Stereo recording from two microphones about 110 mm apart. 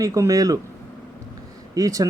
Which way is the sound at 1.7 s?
30° right (ahead or behind).